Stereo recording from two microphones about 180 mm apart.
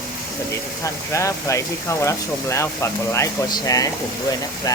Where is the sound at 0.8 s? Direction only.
15° left (ahead or behind).